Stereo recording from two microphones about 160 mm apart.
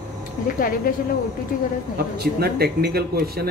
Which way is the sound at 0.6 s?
65° left (ahead or behind).